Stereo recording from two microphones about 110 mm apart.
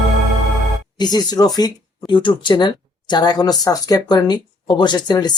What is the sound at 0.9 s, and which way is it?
Speech, 40° left (ahead or behind).